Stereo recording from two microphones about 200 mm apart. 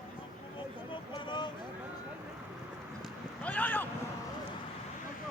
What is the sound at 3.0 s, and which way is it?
Clip-clop, 5° left (ahead or behind).